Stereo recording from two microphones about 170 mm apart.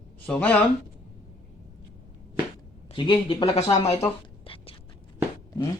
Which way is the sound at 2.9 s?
30° left (ahead or behind).